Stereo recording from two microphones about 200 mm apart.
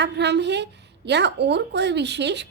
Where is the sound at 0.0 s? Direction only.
60° right (ahead or behind).